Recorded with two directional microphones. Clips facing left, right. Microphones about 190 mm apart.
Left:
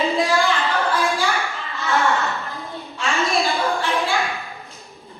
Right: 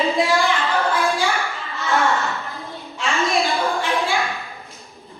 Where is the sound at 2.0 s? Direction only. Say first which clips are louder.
Even; centre (ahead or behind).